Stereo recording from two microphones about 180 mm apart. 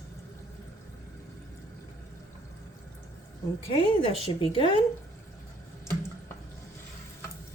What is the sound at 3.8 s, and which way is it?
A woman's voice, 30° left (ahead or behind).